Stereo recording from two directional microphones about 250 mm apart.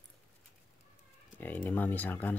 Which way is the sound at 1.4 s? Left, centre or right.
Centre.